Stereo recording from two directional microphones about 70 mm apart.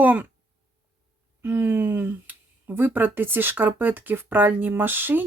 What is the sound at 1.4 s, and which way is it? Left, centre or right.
A woman's voice, right.